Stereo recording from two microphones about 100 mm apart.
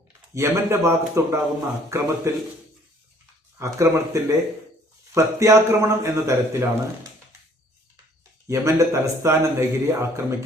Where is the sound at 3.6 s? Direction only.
30° right (ahead or behind).